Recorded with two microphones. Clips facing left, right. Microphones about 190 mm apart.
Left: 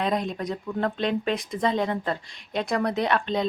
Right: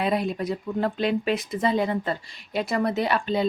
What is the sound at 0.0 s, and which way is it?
Speech, 5° right (ahead or behind).